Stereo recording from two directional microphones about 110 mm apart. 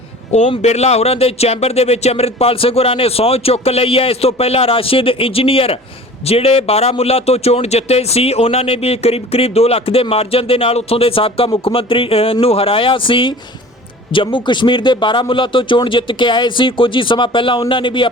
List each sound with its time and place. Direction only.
0.3 s speech: 90° left
0.6 s a man's voice: 80° left; by 18.1 s 50° left (ahead or behind)